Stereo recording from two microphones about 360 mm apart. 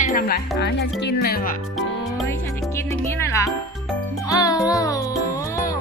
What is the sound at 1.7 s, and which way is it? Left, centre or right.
Music, centre.